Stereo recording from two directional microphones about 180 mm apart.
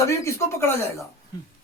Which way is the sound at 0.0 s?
15° left (ahead or behind).